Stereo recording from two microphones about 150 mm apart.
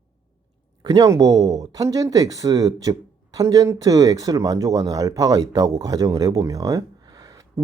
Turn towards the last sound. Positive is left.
turn(degrees=-25)  # may be behind; listen again after turning